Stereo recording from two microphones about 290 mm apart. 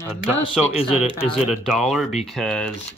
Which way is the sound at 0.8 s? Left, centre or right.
Centre.